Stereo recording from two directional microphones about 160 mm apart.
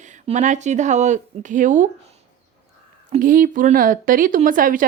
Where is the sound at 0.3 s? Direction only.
50° right (ahead or behind).